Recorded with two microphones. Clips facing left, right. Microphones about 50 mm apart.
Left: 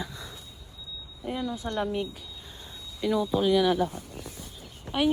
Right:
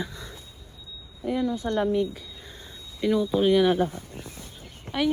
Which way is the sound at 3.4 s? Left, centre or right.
Right.